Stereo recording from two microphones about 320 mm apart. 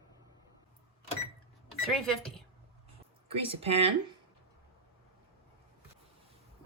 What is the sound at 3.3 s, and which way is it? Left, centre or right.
Speech, centre.